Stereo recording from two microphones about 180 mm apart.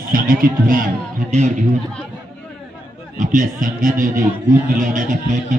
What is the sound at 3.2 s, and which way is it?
Speech, 45° right (ahead or behind).